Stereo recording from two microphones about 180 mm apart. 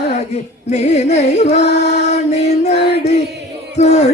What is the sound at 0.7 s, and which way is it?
Music, 40° left (ahead or behind).